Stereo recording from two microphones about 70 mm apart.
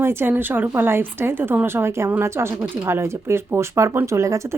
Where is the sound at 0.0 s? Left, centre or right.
Right.